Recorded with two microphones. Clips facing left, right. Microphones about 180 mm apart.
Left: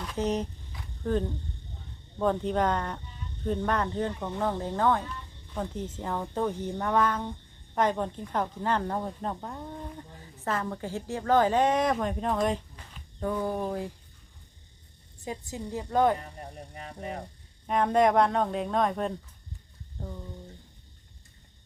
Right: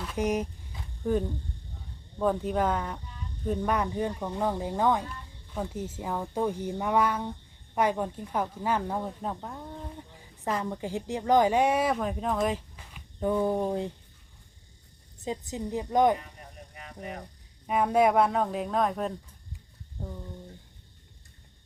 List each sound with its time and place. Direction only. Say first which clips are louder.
0.0 s a woman's voice: right 1 dB; 10° right (ahead or behind)
2.1 s a woman's voice: even; 5° right (ahead or behind)
10.4 s a woman's voice: right 1 dB; 15° right (ahead or behind)
15.2 s a woman's voice: right 3 dB; 20° right (ahead or behind)
16.7 s a sound: left 2 dB; 35° left (ahead or behind)
17.7 s a woman's voice: even; 5° right (ahead or behind)